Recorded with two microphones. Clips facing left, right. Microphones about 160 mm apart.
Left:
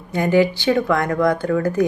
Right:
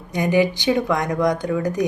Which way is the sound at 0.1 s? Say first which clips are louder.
Left 2 dB; 15° right (ahead or behind).